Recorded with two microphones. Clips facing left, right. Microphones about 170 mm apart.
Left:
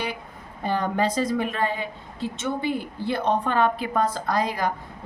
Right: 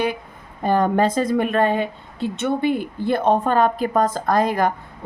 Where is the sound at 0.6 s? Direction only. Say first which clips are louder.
Right 6 dB; 50° right (ahead or behind).